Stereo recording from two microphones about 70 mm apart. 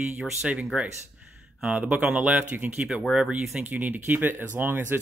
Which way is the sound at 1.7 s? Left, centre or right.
Right.